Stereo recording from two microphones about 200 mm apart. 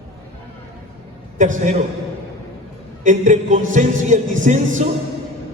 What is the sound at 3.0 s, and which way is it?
Music, 40° right (ahead or behind).